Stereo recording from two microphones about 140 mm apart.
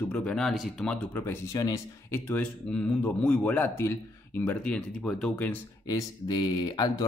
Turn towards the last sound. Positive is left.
turn(degrees=30)  # may be behind; listen again after turning